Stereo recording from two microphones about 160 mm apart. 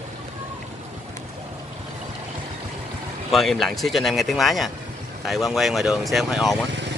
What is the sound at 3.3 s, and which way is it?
Speech, centre (ahead or behind).